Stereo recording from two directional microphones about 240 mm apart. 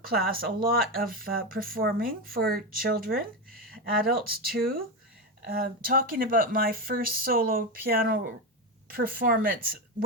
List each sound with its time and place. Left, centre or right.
0.3 s speech: right